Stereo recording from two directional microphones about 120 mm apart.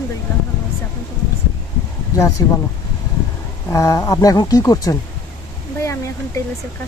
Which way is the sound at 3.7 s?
30° left (ahead or behind).